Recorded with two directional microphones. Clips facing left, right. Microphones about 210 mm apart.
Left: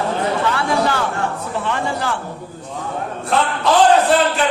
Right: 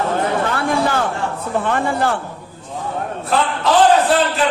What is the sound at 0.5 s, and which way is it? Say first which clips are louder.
Chatter: right 1 dB; 50° right (ahead or behind).